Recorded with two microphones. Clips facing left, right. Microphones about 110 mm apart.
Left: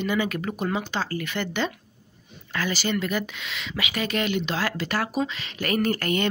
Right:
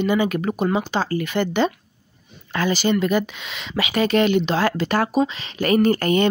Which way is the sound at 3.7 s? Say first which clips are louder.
Right 9 dB; 35° right (ahead or behind).